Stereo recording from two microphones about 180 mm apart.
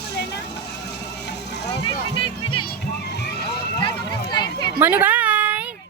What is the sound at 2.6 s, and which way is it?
Music, 65° left (ahead or behind).